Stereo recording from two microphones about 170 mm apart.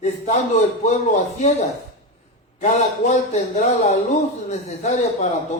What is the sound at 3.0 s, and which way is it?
A man's voice, 40° left (ahead or behind).